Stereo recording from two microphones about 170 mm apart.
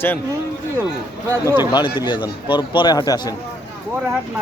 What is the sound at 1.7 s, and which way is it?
A man's voice, 25° left (ahead or behind).